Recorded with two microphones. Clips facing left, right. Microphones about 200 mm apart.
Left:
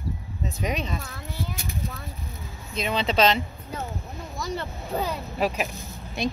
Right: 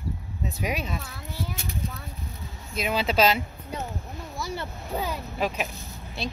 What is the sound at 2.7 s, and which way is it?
Speech, 5° right (ahead or behind).